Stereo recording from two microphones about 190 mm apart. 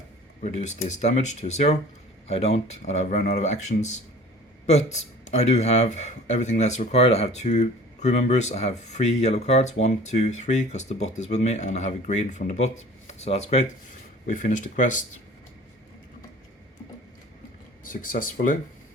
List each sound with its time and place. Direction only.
0.4 s speech: 40° left (ahead or behind)
17.8 s speech: 45° left (ahead or behind)